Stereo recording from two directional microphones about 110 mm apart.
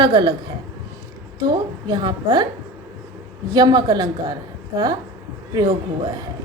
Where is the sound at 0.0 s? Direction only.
45° right (ahead or behind).